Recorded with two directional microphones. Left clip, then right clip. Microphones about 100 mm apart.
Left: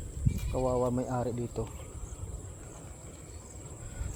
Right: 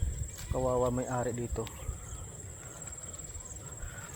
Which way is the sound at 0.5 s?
5° right (ahead or behind).